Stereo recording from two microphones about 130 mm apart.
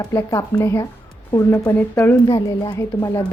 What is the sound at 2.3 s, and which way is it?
Speech, 30° left (ahead or behind).